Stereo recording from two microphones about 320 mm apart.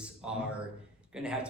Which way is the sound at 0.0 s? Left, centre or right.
Centre.